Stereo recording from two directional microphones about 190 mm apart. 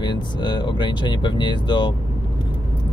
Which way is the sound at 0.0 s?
25° left (ahead or behind).